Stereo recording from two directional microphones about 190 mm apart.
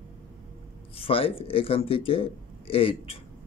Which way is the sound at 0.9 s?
30° left (ahead or behind).